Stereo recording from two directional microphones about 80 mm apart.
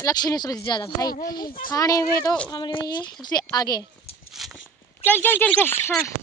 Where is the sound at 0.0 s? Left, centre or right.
Left.